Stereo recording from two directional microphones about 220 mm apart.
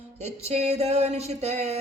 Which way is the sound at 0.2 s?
30° right (ahead or behind).